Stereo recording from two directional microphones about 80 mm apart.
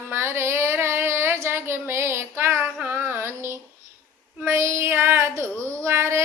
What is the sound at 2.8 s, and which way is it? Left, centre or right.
Music, right.